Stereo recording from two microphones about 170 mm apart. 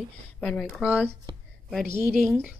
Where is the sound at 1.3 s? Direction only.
25° right (ahead or behind).